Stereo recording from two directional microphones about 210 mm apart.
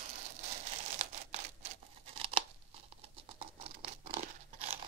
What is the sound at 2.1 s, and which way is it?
Tearing, 25° right (ahead or behind).